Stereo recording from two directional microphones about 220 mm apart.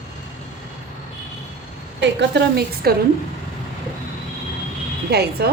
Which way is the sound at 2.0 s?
50° right (ahead or behind).